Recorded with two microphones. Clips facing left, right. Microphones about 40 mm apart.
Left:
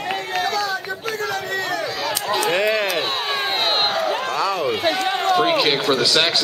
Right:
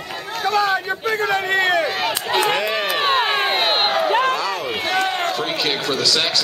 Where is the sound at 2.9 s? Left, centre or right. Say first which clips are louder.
Right 4 dB; right.